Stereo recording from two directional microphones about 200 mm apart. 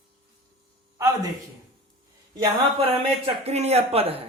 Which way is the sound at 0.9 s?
15° right (ahead or behind).